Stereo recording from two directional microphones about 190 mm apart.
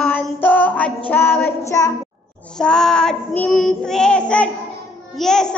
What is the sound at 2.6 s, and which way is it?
Child singing, 5° left (ahead or behind).